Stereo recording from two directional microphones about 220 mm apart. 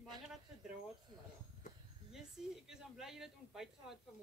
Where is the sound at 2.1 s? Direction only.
Centre (ahead or behind).